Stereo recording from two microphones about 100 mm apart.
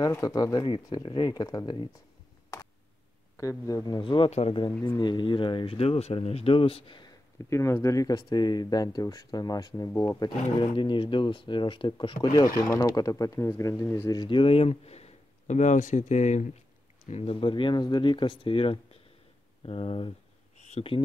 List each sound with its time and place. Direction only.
0.0 s speech: 35° left (ahead or behind)
3.3 s speech: 35° left (ahead or behind)
4.0 s speech: 60° left (ahead or behind); by 4.6 s 85° left
4.6 s speech: 45° left (ahead or behind); by 7.0 s 70° left (ahead or behind)
7.3 s speech: 30° left (ahead or behind)
10.7 s speech: 55° left (ahead or behind)
12.4 s speech: 35° left (ahead or behind)
14.1 s speech: 50° left (ahead or behind); by 16.1 s 90° left
17.2 s speech: 65° left (ahead or behind)
20.6 s speech: 75° left (ahead or behind)